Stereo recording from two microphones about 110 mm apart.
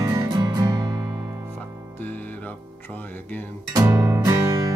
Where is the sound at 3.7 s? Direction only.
35° right (ahead or behind).